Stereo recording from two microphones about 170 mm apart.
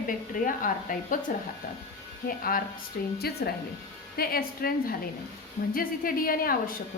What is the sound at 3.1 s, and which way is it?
A woman's voice, 65° left (ahead or behind).